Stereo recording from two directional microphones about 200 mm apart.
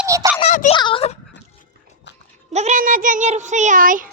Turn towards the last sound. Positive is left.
turn(degrees=-40)  # may be behind; listen again after turning